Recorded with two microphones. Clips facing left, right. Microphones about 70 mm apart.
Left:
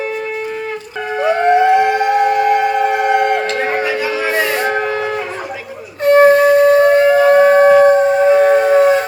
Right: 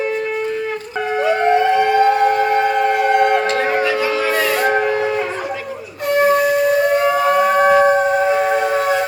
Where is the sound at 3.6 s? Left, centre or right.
Left.